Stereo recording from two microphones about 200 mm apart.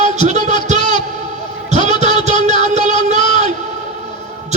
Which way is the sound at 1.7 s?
35° right (ahead or behind).